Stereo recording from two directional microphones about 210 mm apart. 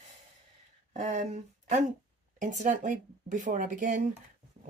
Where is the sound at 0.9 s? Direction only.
35° right (ahead or behind).